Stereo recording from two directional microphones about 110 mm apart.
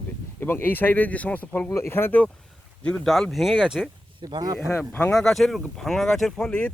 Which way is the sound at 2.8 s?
5° left (ahead or behind).